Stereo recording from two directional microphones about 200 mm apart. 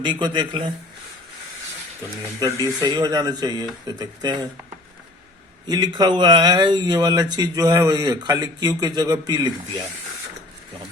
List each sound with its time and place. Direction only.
0.0 s speech: 20° right (ahead or behind)
2.4 s speech: 15° right (ahead or behind)
5.6 s speech: 20° right (ahead or behind)